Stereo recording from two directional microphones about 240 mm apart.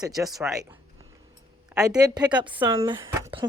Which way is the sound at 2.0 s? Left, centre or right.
Centre.